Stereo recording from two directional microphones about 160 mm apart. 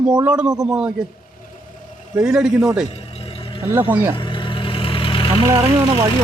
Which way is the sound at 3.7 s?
10° right (ahead or behind).